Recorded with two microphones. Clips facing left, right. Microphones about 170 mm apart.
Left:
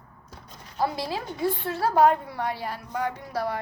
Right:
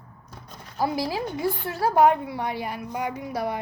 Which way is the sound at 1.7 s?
20° right (ahead or behind).